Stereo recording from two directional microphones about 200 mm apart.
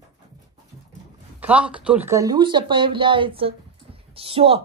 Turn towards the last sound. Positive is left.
turn(degrees=-30)  # may be behind; listen again after turning